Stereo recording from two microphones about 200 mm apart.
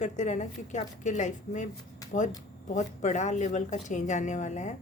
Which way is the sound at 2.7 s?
35° left (ahead or behind).